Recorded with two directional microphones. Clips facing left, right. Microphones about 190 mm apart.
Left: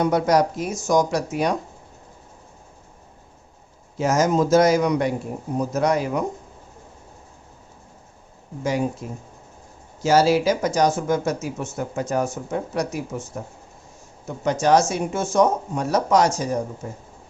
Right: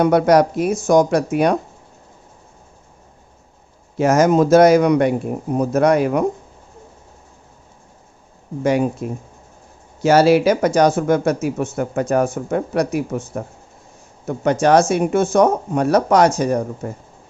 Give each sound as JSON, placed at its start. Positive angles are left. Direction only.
{"t": 0.0, "sound": "speech", "side_deg": -65}
{"t": 3.9, "sound": "speech", "side_deg": -60}
{"t": 8.6, "sound": "speech", "side_deg": -60}
{"t": 14.3, "sound": "speech", "side_deg": -60}